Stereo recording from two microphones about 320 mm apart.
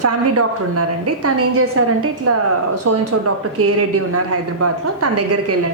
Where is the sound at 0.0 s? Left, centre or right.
Right.